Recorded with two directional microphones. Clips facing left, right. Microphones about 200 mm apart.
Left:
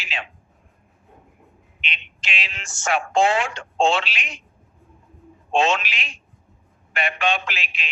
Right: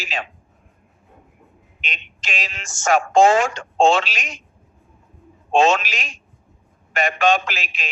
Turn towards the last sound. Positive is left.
turn(degrees=-45)  # may be behind; listen again after turning